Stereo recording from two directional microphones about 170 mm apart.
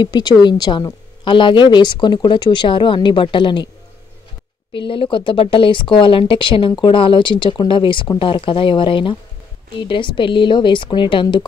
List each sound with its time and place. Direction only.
0.0 s speech: 25° left (ahead or behind)
4.7 s speech: 30° left (ahead or behind)